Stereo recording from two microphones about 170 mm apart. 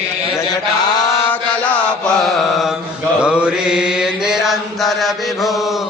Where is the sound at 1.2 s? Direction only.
10° left (ahead or behind).